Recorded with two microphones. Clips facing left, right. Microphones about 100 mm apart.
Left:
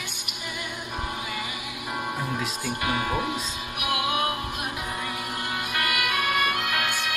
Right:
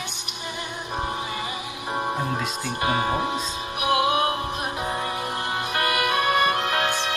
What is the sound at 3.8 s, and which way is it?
Music, 30° right (ahead or behind).